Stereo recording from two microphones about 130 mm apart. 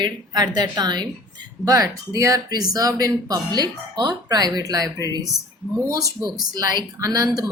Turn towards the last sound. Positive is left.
turn(degrees=-30)  # may be behind; listen again after turning